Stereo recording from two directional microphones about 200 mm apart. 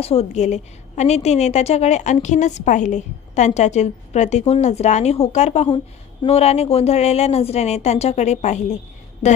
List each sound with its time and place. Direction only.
0.0 s a woman's voice: 30° left (ahead or behind)